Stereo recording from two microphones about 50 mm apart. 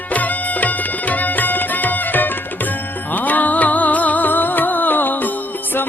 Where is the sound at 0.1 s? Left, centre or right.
Left.